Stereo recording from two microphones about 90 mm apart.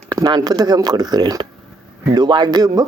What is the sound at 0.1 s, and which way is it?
Speech, 45° right (ahead or behind).